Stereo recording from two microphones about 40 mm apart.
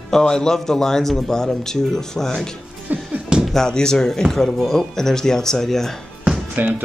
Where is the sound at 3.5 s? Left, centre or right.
Centre.